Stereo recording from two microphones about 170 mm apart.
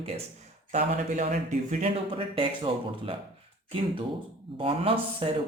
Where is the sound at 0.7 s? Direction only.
45° right (ahead or behind).